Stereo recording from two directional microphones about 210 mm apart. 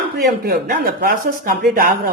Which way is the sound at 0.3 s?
50° right (ahead or behind).